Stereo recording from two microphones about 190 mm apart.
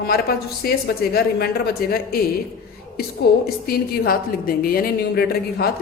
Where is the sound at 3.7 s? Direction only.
55° left (ahead or behind).